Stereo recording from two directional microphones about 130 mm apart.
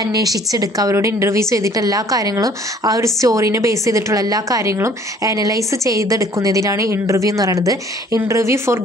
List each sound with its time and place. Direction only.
0.0 s a woman's voice: 30° right (ahead or behind)